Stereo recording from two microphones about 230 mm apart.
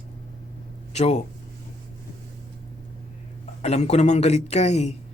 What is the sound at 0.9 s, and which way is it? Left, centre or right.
Speech, left.